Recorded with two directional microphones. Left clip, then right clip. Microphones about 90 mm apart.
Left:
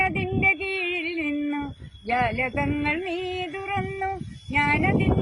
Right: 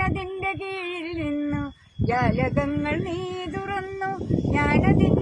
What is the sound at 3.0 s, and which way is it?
Music, 45° right (ahead or behind).